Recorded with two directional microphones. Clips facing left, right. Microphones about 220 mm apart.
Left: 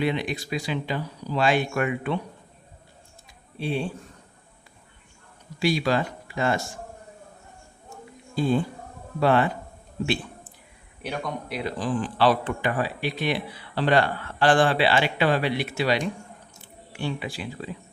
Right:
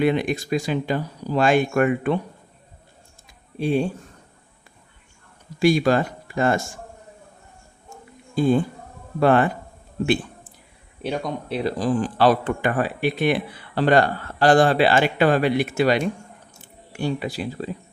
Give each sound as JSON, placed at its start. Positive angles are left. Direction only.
{"t": 0.0, "sound": "a man's voice", "side_deg": -50}
{"t": 3.6, "sound": "a man's voice", "side_deg": -45}
{"t": 5.5, "sound": "speech", "side_deg": -50}
{"t": 8.4, "sound": "a man's voice", "side_deg": -50}
{"t": 11.0, "sound": "a man's voice", "side_deg": -25}
{"t": 17.0, "sound": "speech", "side_deg": -40}